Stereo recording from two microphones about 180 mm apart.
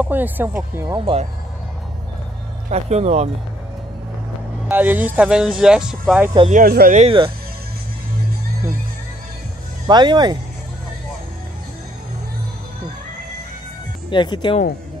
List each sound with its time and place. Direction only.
0.0 s speech: 10° right (ahead or behind)
0.8 s speech: 30° right (ahead or behind)
2.7 s speech: 35° right (ahead or behind)
4.6 s speech: 10° right (ahead or behind)
6.5 s speech: 55° right (ahead or behind)
7.1 s speech: 30° right (ahead or behind)
9.8 s speech: 25° right (ahead or behind)
14.1 s speech: 25° left (ahead or behind)